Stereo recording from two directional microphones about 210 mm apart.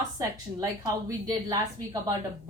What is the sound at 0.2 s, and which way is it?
A woman's voice, 15° right (ahead or behind).